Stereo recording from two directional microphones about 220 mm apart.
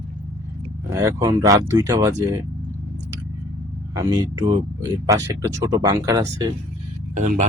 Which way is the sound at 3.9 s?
15° right (ahead or behind).